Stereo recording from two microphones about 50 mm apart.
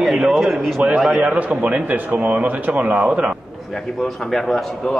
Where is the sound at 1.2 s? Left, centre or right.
Right.